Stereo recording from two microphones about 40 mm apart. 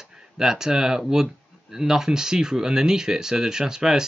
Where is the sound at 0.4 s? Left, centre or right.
Centre.